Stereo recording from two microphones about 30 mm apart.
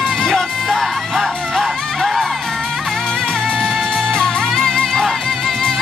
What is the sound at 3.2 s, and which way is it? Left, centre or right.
Music, left.